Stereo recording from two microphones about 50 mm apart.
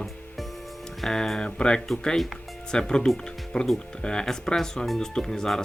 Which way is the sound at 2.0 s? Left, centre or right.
Centre.